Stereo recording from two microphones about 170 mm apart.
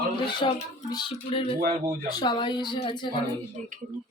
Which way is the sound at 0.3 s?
25° left (ahead or behind).